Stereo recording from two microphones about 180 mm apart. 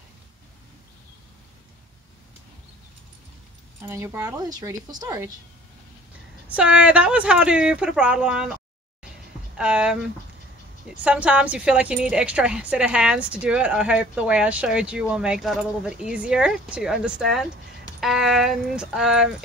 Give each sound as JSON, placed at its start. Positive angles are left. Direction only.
{"t": 3.8, "sound": "speech", "side_deg": -15}
{"t": 6.5, "sound": "a woman's voice", "side_deg": -5}
{"t": 9.6, "sound": "a woman's voice", "side_deg": -5}
{"t": 11.1, "sound": "a woman's voice", "side_deg": -5}